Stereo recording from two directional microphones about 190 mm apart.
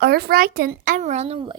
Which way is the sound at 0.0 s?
55° right (ahead or behind).